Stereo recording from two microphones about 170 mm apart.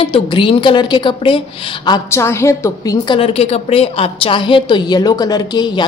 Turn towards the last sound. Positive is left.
turn(degrees=25)  # may be behind; listen again after turning